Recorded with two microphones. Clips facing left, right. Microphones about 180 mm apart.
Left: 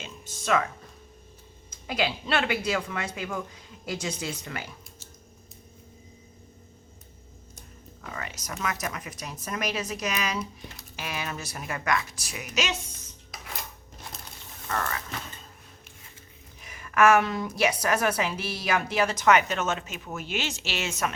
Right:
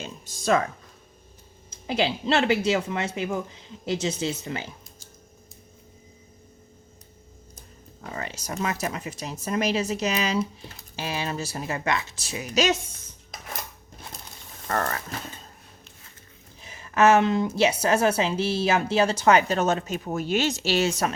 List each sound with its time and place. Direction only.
0.4 s speech: 35° right (ahead or behind)
1.9 s a woman's voice: 25° right (ahead or behind)
8.0 s a woman's voice: 30° right (ahead or behind)
14.7 s speech: 45° right (ahead or behind)
16.6 s a woman's voice: 30° right (ahead or behind)